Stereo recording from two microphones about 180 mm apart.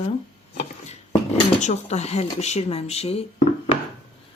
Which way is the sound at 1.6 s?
40° left (ahead or behind).